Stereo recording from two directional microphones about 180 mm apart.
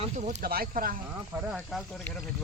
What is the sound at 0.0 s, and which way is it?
Speech, 40° right (ahead or behind).